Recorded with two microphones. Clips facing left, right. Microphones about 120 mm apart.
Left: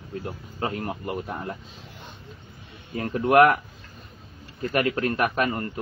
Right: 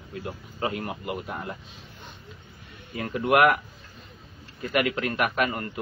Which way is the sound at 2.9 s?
35° left (ahead or behind).